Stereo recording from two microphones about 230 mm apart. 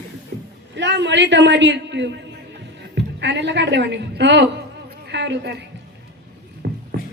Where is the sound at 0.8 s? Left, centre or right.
Right.